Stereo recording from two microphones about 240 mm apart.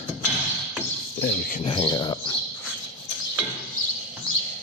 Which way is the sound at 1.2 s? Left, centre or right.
Left.